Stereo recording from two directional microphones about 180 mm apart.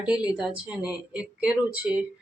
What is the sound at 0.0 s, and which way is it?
A woman's voice, 5° right (ahead or behind).